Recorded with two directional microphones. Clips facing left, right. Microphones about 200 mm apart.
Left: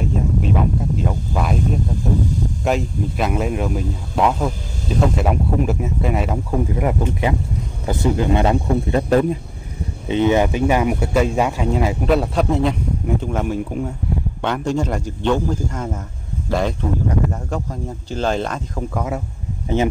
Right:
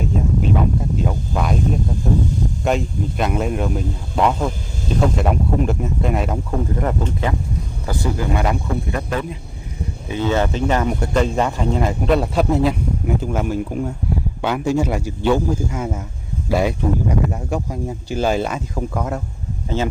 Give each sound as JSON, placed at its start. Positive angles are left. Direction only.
{"t": 0.0, "sound": "a sound", "side_deg": 0}
{"t": 2.6, "sound": "speech", "side_deg": 0}
{"t": 9.1, "sound": "speech", "side_deg": 40}
{"t": 10.0, "sound": "speech", "side_deg": 20}